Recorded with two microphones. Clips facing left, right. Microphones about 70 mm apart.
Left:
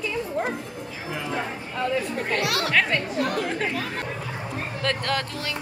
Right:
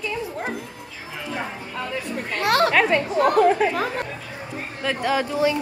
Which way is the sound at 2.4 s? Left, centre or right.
Right.